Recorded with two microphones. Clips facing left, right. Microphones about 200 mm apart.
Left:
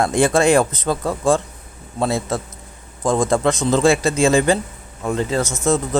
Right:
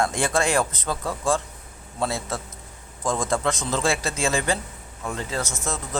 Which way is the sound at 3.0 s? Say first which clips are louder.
Left 7 dB; 60° left (ahead or behind).